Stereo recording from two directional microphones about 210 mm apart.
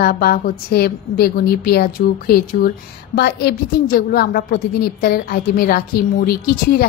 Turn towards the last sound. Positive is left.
turn(degrees=45)  # may be behind; listen again after turning